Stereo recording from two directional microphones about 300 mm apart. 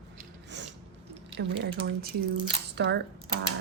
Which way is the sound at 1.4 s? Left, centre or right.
Right.